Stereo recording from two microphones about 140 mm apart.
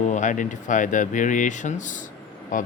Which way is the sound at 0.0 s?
60° left (ahead or behind).